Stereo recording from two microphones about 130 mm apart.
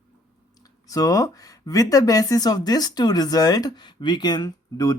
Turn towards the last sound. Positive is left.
turn(degrees=30)  # may be behind; listen again after turning